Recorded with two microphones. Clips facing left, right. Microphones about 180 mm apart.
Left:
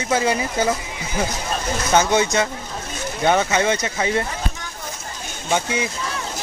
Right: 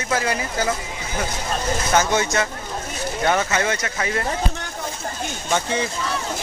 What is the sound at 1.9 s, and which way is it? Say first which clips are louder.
Speech: left 3 dB; 15° left (ahead or behind).